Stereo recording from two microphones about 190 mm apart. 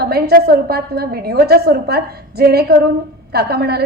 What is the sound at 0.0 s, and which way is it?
A woman's voice, 55° right (ahead or behind).